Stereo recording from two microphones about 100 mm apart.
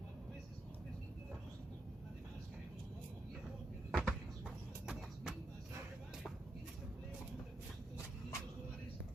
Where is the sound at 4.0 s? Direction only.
10° right (ahead or behind).